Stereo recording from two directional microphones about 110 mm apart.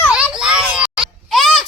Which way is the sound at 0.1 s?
10° right (ahead or behind).